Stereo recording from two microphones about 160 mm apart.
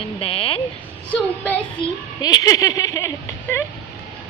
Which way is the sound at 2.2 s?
25° left (ahead or behind).